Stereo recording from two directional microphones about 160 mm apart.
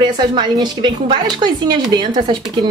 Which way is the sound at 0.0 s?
30° right (ahead or behind).